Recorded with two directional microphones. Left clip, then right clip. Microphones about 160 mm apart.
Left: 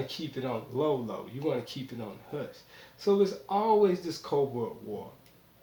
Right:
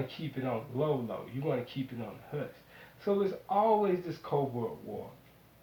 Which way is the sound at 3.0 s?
60° left (ahead or behind).